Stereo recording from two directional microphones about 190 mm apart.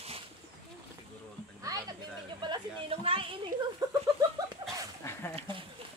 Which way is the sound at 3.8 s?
20° right (ahead or behind).